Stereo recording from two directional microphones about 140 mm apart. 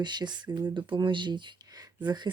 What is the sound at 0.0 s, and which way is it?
Speech, 30° right (ahead or behind).